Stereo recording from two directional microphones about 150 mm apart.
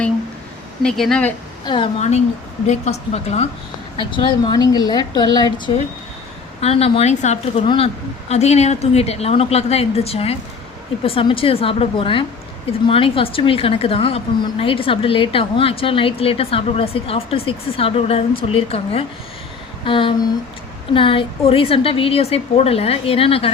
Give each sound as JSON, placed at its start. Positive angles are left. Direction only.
{"t": 0.8, "sound": "speech", "side_deg": 5}
{"t": 1.6, "sound": "a woman's voice", "side_deg": 35}
{"t": 2.0, "sound": "a woman's voice", "side_deg": 45}
{"t": 3.9, "sound": "a woman's voice", "side_deg": 35}
{"t": 6.6, "sound": "a woman's voice", "side_deg": 40}